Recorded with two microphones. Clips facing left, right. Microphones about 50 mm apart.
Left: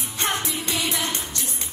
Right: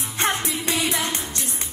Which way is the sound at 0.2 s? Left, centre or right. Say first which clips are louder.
Right 2 dB; right.